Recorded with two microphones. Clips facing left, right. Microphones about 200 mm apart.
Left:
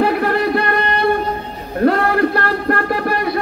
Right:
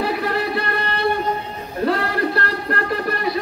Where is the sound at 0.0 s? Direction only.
55° left (ahead or behind).